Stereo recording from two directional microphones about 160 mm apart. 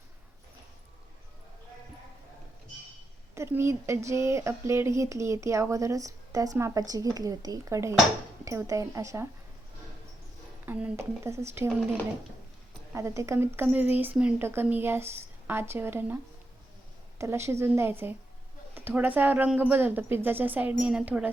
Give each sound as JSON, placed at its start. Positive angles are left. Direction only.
{"t": 3.3, "sound": "speech", "side_deg": -15}
{"t": 10.7, "sound": "speech", "side_deg": -10}
{"t": 12.9, "sound": "speech", "side_deg": -15}
{"t": 17.2, "sound": "speech", "side_deg": -15}